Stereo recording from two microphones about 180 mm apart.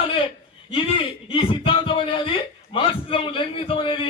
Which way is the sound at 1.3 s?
30° left (ahead or behind).